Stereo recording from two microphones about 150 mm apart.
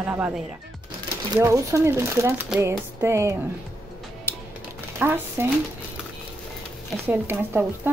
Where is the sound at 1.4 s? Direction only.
20° right (ahead or behind).